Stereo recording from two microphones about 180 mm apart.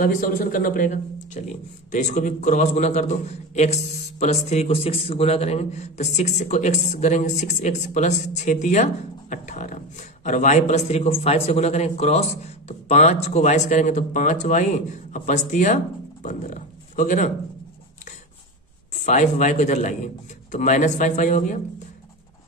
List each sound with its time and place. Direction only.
0.0 s a man's voice: 50° left (ahead or behind)
18.9 s a man's voice: 40° left (ahead or behind)